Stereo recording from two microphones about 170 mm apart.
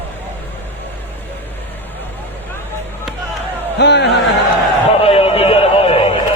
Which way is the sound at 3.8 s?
85° left.